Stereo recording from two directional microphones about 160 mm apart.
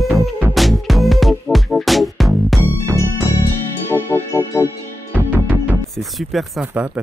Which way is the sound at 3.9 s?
15° left (ahead or behind).